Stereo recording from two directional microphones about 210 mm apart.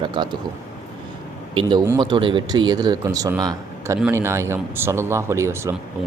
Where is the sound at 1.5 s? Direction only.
15° right (ahead or behind).